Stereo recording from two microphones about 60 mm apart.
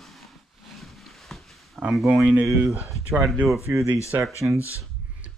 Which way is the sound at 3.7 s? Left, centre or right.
Right.